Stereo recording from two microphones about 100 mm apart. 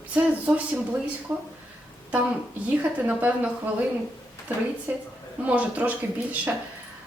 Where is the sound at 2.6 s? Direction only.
15° right (ahead or behind).